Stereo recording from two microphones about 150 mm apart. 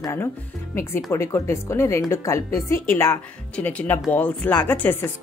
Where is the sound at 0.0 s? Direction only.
15° left (ahead or behind).